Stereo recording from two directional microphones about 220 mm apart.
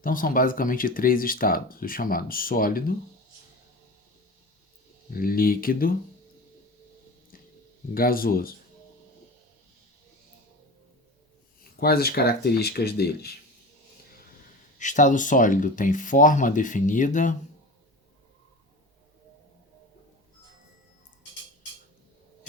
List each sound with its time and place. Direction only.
0.0 s speech: 40° left (ahead or behind)
5.1 s speech: 40° left (ahead or behind)
7.9 s speech: 40° left (ahead or behind)
11.8 s speech: 45° left (ahead or behind)
14.8 s speech: 35° left (ahead or behind)